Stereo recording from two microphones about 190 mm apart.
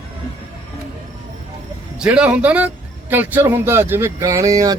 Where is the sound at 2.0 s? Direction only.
5° right (ahead or behind).